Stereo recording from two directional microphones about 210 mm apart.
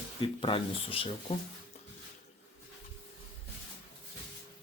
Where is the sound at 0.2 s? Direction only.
25° left (ahead or behind).